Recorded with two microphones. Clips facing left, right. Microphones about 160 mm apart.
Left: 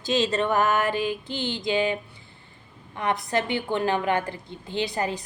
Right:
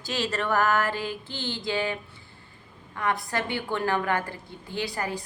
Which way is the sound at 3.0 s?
20° left (ahead or behind).